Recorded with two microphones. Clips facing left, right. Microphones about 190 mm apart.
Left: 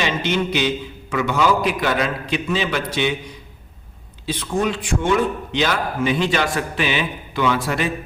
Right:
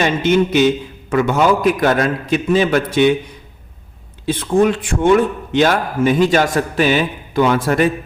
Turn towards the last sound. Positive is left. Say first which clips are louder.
# right 6 dB
turn(degrees=-50)  # may be behind; listen again after turning